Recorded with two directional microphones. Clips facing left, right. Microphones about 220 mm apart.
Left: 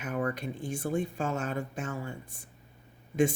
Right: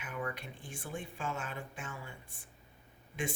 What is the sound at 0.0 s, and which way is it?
Speech, 45° left (ahead or behind).